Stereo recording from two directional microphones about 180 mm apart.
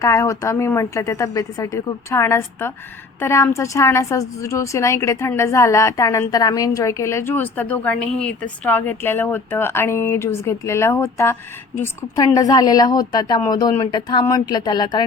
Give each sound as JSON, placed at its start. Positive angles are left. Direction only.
{"t": 0.0, "sound": "a woman's voice", "side_deg": 15}